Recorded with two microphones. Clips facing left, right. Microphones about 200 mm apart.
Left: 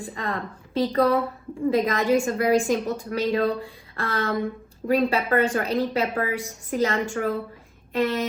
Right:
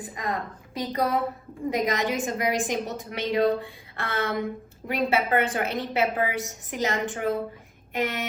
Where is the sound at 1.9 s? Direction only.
20° right (ahead or behind).